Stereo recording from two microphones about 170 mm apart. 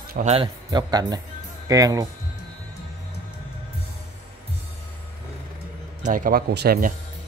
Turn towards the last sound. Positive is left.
turn(degrees=-65)  # may be behind; listen again after turning